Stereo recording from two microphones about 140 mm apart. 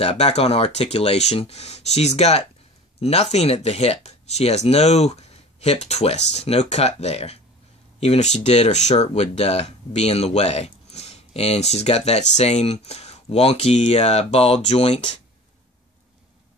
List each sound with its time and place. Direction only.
0.0 s speech: 50° left (ahead or behind)